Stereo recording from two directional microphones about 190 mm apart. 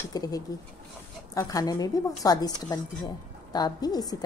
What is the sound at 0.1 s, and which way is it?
A woman's voice, 20° left (ahead or behind).